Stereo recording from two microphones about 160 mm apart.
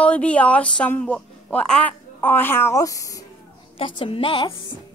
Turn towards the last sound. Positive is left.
turn(degrees=30)  # may be behind; listen again after turning